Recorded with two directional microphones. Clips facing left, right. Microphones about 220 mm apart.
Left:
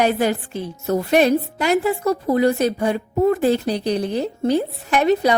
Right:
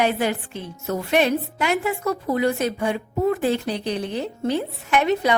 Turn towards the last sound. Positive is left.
turn(degrees=35)  # may be behind; listen again after turning